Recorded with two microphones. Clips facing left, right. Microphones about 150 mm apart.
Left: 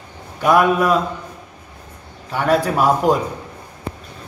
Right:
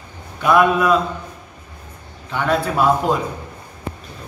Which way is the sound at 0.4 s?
40° left (ahead or behind).